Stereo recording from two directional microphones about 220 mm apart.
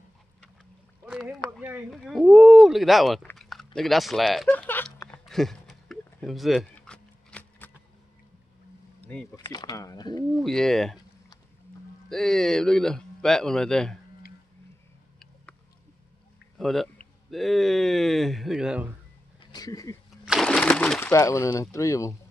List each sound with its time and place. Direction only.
1.0 s a sound: 5° right (ahead or behind)
9.0 s speech: 5° left (ahead or behind)
9.4 s speech: 20° left (ahead or behind)
10.3 s speech: centre (ahead or behind)
12.1 s speech: centre (ahead or behind)
16.5 s speech: centre (ahead or behind)
19.5 s speech: 15° left (ahead or behind)
20.2 s a sound: centre (ahead or behind)